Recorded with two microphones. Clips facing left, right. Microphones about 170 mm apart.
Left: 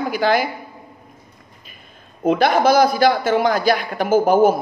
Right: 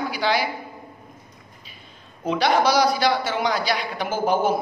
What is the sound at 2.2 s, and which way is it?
A man's voice, 50° left (ahead or behind).